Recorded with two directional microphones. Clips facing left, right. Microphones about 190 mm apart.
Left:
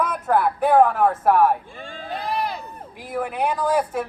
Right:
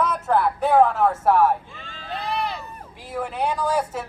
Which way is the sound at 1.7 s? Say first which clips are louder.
Left 3 dB; 50° left (ahead or behind).